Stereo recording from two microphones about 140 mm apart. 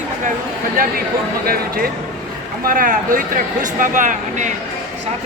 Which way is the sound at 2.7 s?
75° right (ahead or behind).